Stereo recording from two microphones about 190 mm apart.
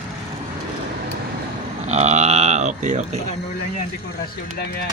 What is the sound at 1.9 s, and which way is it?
Cattle, 35° right (ahead or behind).